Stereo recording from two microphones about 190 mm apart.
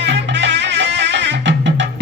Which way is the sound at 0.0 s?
70° right (ahead or behind).